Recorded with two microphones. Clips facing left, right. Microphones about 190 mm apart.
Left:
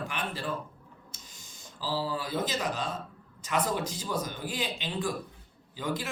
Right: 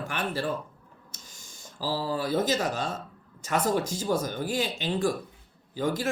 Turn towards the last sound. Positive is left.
turn(degrees=-45)  # may be behind; listen again after turning